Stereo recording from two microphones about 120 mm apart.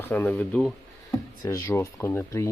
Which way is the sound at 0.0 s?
15° left (ahead or behind).